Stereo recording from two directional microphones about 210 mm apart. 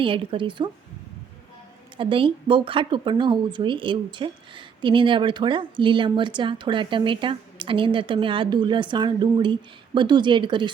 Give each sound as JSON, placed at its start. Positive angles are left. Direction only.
{"t": 0.0, "sound": "speech", "side_deg": -25}
{"t": 2.0, "sound": "speech", "side_deg": -25}